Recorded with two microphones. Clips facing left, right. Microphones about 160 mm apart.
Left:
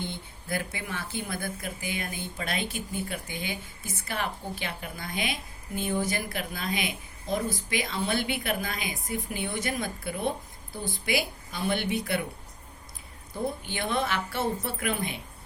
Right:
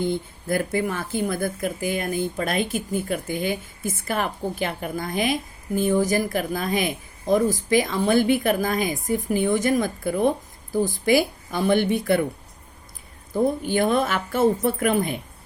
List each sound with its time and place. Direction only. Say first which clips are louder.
0.0 s speech: right 12 dB; 50° right (ahead or behind)
10.7 s speech: right 13 dB; 90° right
11.0 s speech: right 8 dB; 45° right (ahead or behind)
13.7 s speech: right 8 dB; 50° right (ahead or behind)